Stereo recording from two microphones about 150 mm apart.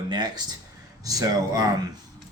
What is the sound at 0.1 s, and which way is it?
Speech, 30° right (ahead or behind).